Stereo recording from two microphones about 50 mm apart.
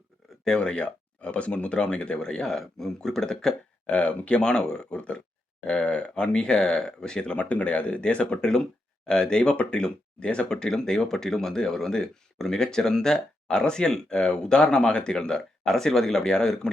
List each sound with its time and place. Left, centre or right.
0.4 s speech: centre
3.8 s speech: left